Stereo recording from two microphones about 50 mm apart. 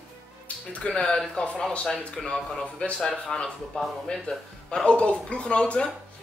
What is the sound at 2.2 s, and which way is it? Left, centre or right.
Speech, centre.